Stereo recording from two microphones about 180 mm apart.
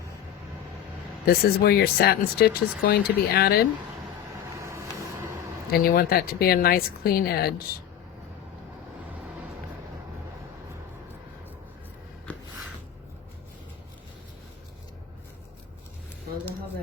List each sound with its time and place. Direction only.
1.2 s speech: 60° left (ahead or behind)
5.7 s speech: 55° left (ahead or behind)